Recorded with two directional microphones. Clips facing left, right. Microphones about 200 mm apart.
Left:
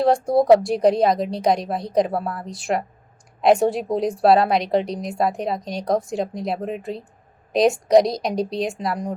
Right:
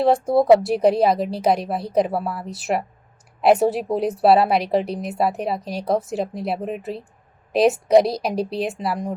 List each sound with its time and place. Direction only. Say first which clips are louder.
0.0 s a woman's voice: even; centre (ahead or behind)